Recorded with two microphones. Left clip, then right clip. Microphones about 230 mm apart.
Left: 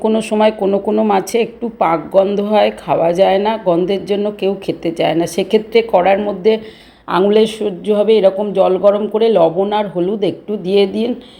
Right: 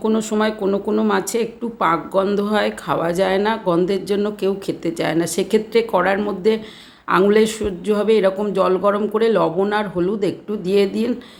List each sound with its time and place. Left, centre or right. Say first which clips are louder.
0.3 s speech: left 6 dB; centre